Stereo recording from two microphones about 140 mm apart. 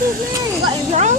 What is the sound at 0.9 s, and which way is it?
Speech, 55° right (ahead or behind).